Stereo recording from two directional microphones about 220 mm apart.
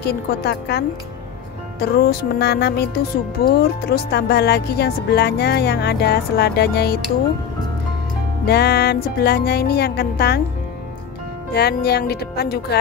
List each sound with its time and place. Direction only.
0.0 s music: 45° left (ahead or behind)
8.5 s music: 45° left (ahead or behind)
11.5 s music: 45° left (ahead or behind)